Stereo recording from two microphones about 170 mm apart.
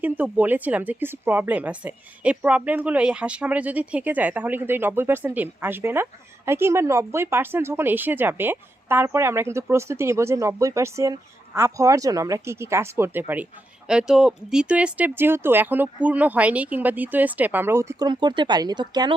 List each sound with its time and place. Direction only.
0.0 s speech: 10° right (ahead or behind)
18.1 s speech: 25° right (ahead or behind)